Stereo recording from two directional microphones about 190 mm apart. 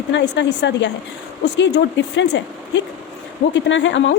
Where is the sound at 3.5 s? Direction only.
70° left (ahead or behind).